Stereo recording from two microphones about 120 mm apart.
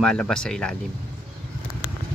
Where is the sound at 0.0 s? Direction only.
5° left (ahead or behind).